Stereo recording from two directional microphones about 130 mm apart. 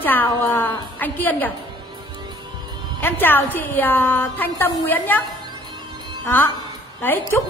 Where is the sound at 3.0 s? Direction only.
15° left (ahead or behind).